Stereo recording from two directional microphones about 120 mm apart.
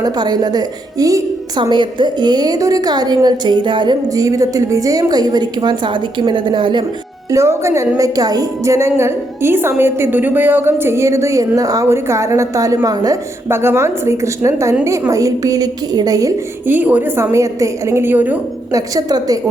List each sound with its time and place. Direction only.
0.0 s a woman's voice: 35° right (ahead or behind)
1.7 s a woman's voice: 40° right (ahead or behind)
7.3 s a woman's voice: 25° right (ahead or behind)
13.5 s a woman's voice: 20° right (ahead or behind)
16.6 s a woman's voice: 15° right (ahead or behind)
18.7 s a woman's voice: 30° right (ahead or behind)